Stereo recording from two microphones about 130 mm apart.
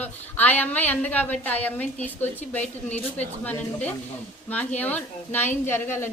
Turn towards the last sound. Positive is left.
turn(degrees=20)  # may be behind; listen again after turning